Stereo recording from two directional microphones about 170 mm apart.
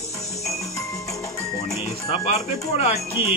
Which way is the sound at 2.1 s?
35° left (ahead or behind).